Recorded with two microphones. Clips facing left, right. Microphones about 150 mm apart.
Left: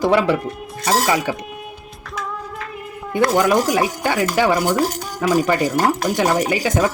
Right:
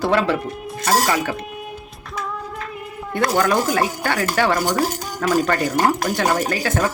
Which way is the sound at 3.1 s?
10° left (ahead or behind).